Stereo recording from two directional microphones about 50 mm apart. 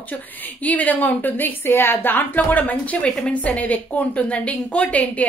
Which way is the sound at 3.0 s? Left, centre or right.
Left.